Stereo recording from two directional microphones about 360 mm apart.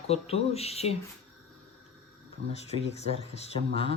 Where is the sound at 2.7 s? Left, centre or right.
Centre.